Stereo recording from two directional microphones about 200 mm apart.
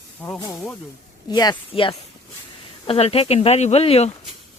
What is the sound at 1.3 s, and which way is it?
Speech, 20° left (ahead or behind).